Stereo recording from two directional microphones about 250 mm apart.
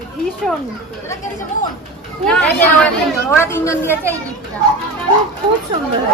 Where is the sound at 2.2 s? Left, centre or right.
Centre.